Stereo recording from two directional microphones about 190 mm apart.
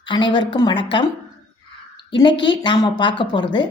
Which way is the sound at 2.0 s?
25° left (ahead or behind).